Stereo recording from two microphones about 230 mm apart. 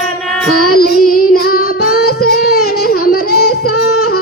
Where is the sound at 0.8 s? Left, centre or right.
Left.